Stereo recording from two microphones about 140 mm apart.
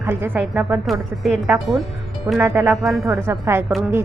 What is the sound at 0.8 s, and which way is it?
Speech, centre (ahead or behind).